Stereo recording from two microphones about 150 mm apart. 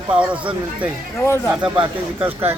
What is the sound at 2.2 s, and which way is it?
Speech, 15° right (ahead or behind).